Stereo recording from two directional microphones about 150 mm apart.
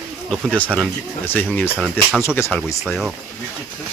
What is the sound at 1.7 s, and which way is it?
Speech, 5° right (ahead or behind).